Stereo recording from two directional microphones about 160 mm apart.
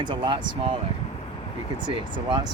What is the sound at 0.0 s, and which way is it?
Speech, 30° right (ahead or behind).